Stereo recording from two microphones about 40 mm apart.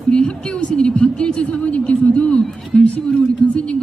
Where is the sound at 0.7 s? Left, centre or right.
Left.